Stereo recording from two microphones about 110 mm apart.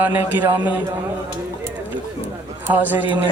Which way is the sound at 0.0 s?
15° right (ahead or behind).